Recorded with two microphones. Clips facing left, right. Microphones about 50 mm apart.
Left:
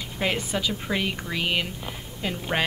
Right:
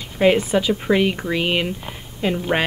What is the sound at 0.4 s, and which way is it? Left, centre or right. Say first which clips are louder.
Speech: right 8 dB; centre.